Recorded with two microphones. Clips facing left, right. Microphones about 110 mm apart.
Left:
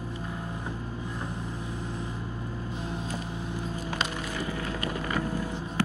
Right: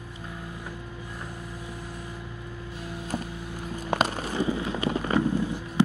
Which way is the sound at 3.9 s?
50° right (ahead or behind).